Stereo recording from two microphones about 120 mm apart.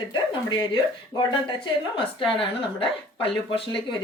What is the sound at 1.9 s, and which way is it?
A woman's voice, 45° left (ahead or behind).